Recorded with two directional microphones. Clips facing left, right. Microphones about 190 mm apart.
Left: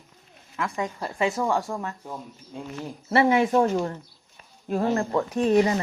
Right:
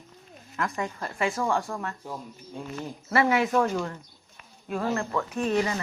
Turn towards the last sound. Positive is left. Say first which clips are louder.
# left 6 dB
turn(degrees=30)  # may be behind; listen again after turning